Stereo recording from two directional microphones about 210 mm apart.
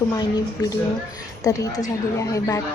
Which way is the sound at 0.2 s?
20° left (ahead or behind).